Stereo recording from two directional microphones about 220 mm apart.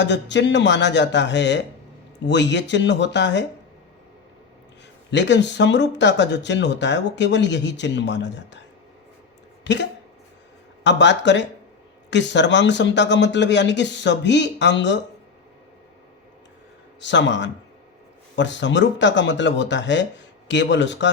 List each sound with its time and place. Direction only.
0.0 s speech: 55° left (ahead or behind)
5.1 s speech: 55° left (ahead or behind)
9.6 s speech: 55° left (ahead or behind)
17.0 s speech: 55° left (ahead or behind)